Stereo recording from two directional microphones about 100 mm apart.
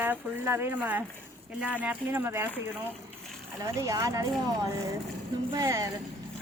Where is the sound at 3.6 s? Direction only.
35° right (ahead or behind).